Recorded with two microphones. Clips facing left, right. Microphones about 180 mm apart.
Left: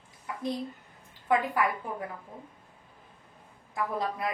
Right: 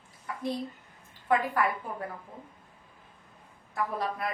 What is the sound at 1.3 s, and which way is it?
Speech, 15° left (ahead or behind).